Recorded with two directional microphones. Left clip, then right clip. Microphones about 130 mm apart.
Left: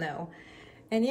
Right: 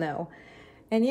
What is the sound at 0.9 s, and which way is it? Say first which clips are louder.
Speech: right 3 dB; 30° right (ahead or behind).